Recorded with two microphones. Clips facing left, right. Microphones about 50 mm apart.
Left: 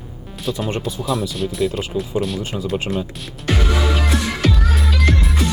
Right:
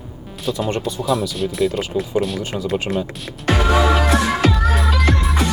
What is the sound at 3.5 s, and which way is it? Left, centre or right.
Music, right.